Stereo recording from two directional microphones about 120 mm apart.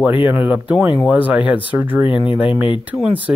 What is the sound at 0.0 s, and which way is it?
Speech, 15° right (ahead or behind).